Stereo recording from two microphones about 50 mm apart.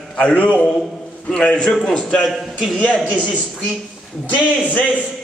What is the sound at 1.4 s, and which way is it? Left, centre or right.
Speech, centre.